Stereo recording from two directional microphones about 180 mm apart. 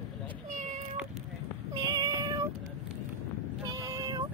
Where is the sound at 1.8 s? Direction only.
25° right (ahead or behind).